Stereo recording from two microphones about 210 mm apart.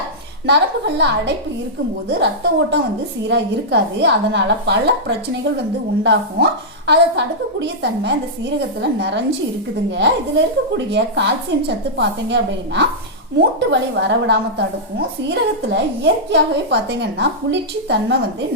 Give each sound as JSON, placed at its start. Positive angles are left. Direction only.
{"t": 0.4, "sound": "a woman's voice", "side_deg": -55}